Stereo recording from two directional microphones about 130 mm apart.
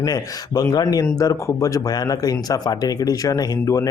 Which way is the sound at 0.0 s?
30° left (ahead or behind).